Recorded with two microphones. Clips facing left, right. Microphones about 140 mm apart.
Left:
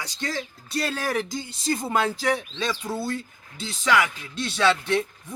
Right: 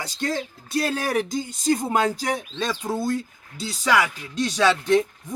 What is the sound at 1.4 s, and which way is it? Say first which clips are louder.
Speech: right 5 dB; 45° right (ahead or behind).